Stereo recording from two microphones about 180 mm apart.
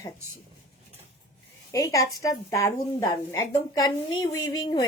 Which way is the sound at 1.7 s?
20° left (ahead or behind).